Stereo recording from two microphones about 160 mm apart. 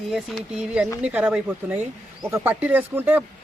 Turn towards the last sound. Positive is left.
turn(degrees=-10)  # may be behind; listen again after turning